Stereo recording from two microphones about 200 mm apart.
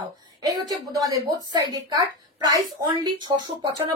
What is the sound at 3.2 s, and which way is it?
Speech, 20° right (ahead or behind).